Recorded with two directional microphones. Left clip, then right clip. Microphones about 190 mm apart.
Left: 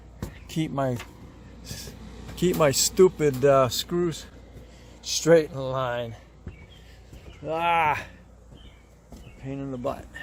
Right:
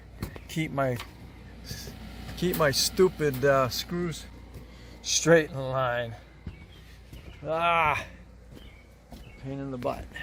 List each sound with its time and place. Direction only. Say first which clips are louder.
0.4 s speech: left 1 dB; 20° left (ahead or behind)
1.6 s speech: left 1 dB; 35° left (ahead or behind)
5.0 s speech: left 2 dB; 15° left (ahead or behind)
7.4 s speech: left 1 dB; 15° left (ahead or behind)
9.4 s speech: left 2 dB; 15° left (ahead or behind)